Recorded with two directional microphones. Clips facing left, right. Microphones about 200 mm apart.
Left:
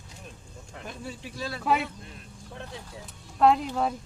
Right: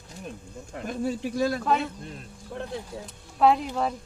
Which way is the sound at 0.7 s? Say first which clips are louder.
Right 10 dB; 45° right (ahead or behind).